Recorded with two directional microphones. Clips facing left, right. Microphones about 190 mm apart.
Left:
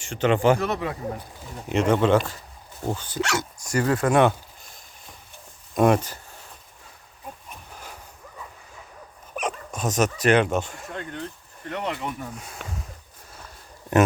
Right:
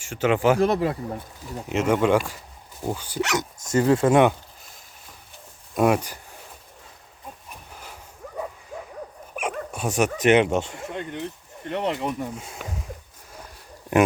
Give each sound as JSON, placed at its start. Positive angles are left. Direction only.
{"t": 0.0, "sound": "speech", "side_deg": -5}
{"t": 0.6, "sound": "a man's voice", "side_deg": -35}
{"t": 1.7, "sound": "speech", "side_deg": -5}
{"t": 5.7, "sound": "speech", "side_deg": -5}
{"t": 9.3, "sound": "dog", "side_deg": -10}
{"t": 10.2, "sound": "speech", "side_deg": -20}